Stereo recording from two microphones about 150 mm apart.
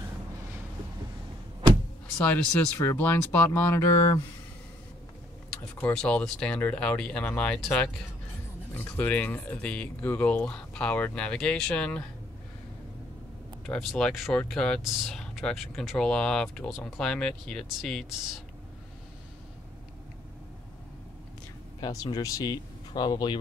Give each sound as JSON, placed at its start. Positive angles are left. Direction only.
{"t": 2.1, "sound": "speech", "side_deg": 10}
{"t": 5.8, "sound": "speech", "side_deg": 10}
{"t": 8.7, "sound": "speech", "side_deg": 10}
{"t": 13.7, "sound": "speech", "side_deg": 5}
{"t": 21.8, "sound": "speech", "side_deg": 25}